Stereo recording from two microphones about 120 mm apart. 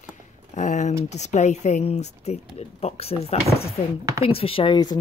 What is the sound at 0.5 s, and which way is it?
Speech, 85° left.